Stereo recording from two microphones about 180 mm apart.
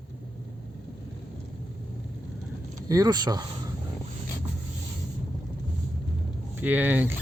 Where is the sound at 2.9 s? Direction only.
20° right (ahead or behind).